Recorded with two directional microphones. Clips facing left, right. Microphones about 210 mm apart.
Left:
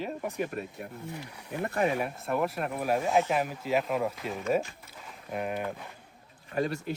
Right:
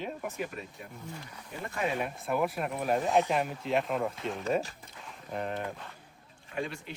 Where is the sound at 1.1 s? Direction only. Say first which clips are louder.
Left 4 dB; 10° left (ahead or behind).